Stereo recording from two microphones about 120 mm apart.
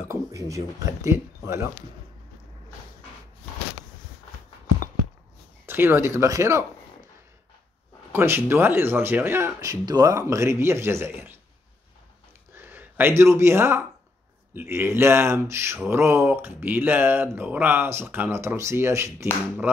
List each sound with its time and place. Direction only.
0.1 s speech: 25° right (ahead or behind)
5.7 s speech: 20° right (ahead or behind)
8.1 s speech: 20° right (ahead or behind)
12.5 s speech: 20° right (ahead or behind)